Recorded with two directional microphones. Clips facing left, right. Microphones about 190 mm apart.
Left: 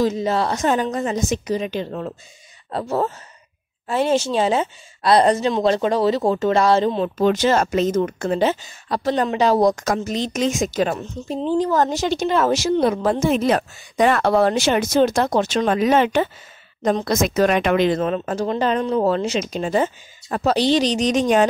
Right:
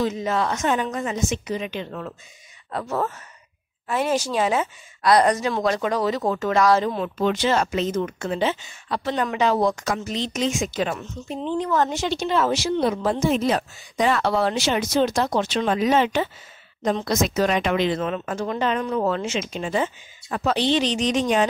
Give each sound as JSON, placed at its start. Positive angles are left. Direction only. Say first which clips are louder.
{"t": 0.0, "sound": "speech", "louder": "left 4 dB", "side_deg": 35}